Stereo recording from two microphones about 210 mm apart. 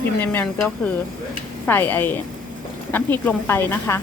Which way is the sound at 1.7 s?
10° left (ahead or behind).